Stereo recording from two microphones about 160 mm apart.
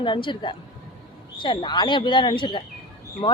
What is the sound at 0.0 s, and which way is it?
Speech, 30° left (ahead or behind).